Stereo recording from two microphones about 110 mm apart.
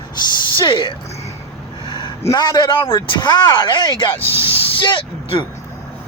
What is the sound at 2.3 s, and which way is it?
Speech, 40° left (ahead or behind).